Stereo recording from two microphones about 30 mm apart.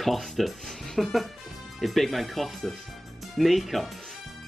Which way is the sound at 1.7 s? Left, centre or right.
Centre.